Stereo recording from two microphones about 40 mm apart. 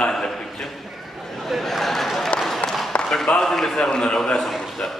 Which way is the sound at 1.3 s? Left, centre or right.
Centre.